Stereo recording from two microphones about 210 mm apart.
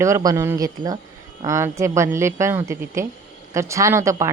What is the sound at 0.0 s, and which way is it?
A woman's voice, 15° right (ahead or behind).